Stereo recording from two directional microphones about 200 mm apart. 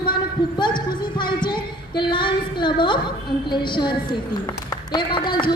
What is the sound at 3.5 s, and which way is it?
Speech, 20° left (ahead or behind).